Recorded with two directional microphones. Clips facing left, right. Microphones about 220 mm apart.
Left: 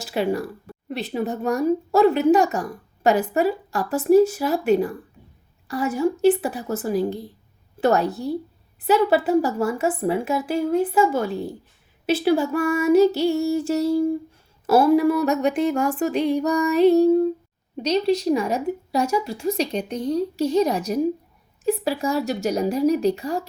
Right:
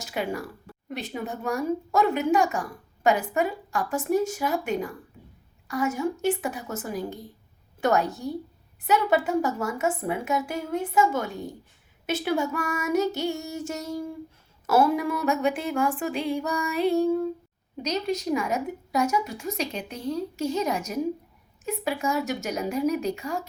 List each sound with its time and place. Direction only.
0.0 s speech: 35° left (ahead or behind)